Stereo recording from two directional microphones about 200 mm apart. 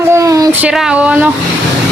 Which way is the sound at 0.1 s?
15° right (ahead or behind).